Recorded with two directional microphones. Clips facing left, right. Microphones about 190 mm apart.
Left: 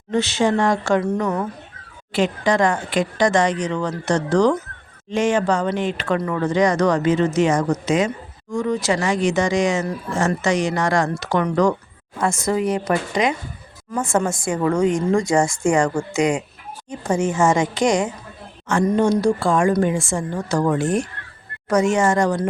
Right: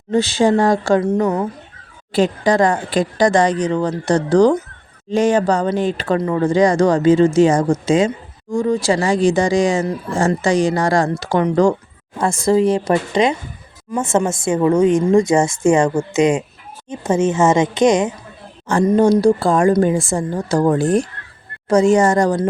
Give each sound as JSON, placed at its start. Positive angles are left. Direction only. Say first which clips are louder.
{"t": 0.1, "sound": "a woman's voice", "louder": "right 4 dB", "side_deg": -35}
{"t": 18.7, "sound": "speech", "louder": "right 4 dB", "side_deg": -35}